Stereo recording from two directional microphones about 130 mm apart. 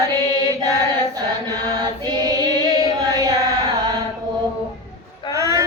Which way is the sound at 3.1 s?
25° right (ahead or behind).